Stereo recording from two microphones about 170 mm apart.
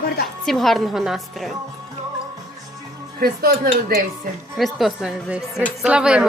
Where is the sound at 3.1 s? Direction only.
60° right (ahead or behind).